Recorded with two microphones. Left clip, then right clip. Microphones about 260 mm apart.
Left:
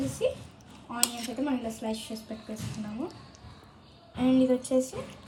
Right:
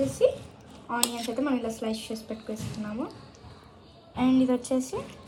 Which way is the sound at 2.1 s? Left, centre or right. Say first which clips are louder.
Right 4 dB; right.